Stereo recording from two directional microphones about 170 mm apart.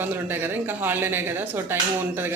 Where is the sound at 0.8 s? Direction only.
10° right (ahead or behind).